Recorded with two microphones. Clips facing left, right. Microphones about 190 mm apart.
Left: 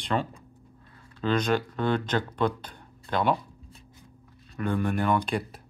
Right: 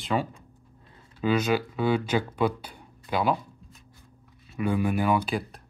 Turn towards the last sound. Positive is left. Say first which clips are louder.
# right 1 dB
turn(degrees=-5)  # may be behind; listen again after turning